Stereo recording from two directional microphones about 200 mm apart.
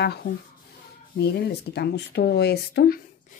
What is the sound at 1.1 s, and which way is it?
Speech, 55° left (ahead or behind).